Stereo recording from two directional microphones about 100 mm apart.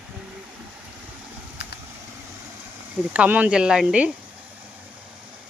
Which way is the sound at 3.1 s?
15° right (ahead or behind).